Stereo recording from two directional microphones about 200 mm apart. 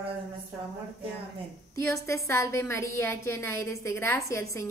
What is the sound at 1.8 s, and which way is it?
A woman's voice, 15° left (ahead or behind).